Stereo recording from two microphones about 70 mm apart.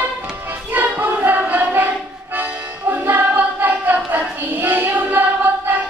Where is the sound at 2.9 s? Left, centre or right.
Right.